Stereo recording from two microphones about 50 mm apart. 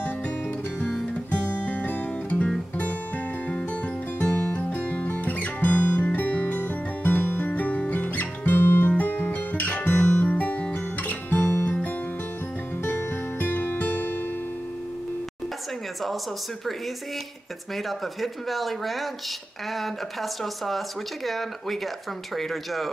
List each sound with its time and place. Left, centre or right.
1.3 s music: left
4.2 s music: left
9.9 s guitar: left
10.2 s music: left
11.0 s guitar: left
12.8 s music: left
17.7 s speech: centre